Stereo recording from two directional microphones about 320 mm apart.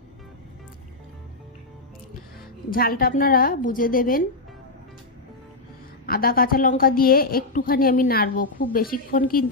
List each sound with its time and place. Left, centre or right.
2.7 s a woman's voice: left
6.0 s a woman's voice: left